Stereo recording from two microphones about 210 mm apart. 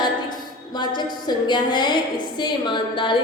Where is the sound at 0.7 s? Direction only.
20° left (ahead or behind).